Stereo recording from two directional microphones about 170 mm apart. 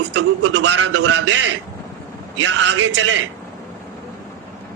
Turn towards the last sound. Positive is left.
turn(degrees=-90)